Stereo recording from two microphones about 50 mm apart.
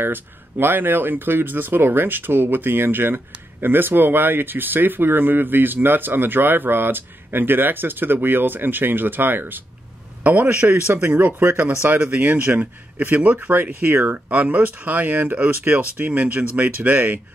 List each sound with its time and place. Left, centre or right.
0.0 s speech: right
10.2 s a man's voice: right
10.6 s speech: right
11.1 s speech: right
13.8 s speech: right
14.1 s speech: right